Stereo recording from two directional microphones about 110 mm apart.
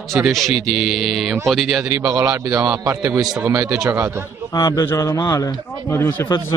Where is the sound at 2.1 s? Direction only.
30° right (ahead or behind).